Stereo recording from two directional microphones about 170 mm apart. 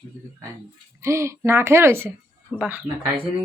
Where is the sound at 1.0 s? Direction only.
15° right (ahead or behind).